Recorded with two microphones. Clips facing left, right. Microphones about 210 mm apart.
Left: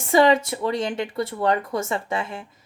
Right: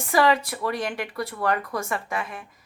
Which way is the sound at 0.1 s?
25° left (ahead or behind).